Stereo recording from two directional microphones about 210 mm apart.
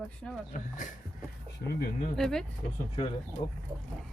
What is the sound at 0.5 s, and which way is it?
Speech, 35° left (ahead or behind).